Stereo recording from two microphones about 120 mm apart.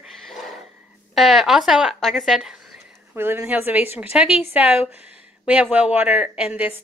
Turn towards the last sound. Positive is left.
turn(degrees=-10)  # may be behind; listen again after turning